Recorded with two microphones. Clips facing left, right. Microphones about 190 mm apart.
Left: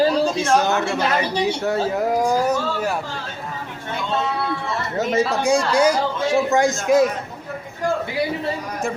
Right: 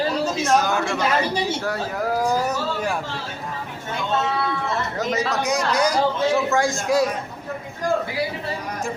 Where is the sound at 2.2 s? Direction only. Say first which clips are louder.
Left 3 dB; 10° left (ahead or behind).